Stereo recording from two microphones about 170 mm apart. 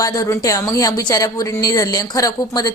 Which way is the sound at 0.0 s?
20° left (ahead or behind).